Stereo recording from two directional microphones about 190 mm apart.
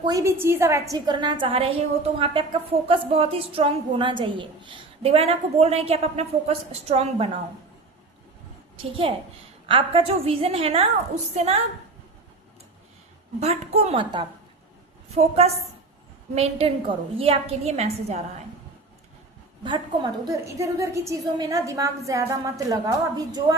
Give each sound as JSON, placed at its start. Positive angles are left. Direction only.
{"t": 0.0, "sound": "speech", "side_deg": -20}
{"t": 8.7, "sound": "a woman's voice", "side_deg": -30}
{"t": 13.4, "sound": "a woman's voice", "side_deg": -35}
{"t": 19.6, "sound": "a woman's voice", "side_deg": -25}